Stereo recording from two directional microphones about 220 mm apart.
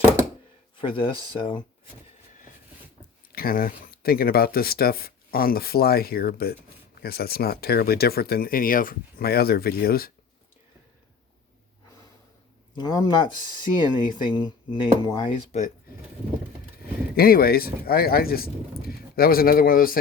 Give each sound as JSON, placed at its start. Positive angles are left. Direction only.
{"t": 0.8, "sound": "speech", "side_deg": 25}
{"t": 3.3, "sound": "speech", "side_deg": 40}
{"t": 12.7, "sound": "speech", "side_deg": 20}
{"t": 17.2, "sound": "speech", "side_deg": 40}